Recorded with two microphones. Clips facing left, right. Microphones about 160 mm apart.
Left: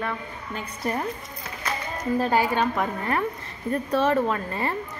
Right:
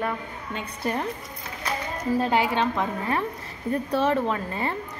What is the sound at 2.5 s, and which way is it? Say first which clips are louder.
A woman's voice: left 1 dB; 5° left (ahead or behind).